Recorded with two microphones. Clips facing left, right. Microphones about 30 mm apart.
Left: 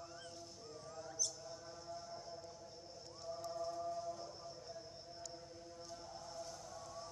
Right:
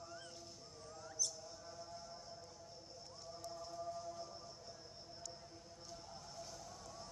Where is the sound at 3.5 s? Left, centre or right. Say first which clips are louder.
Left 4 dB; centre.